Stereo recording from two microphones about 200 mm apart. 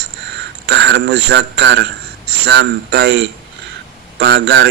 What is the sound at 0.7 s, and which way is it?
A man's voice, 55° right (ahead or behind).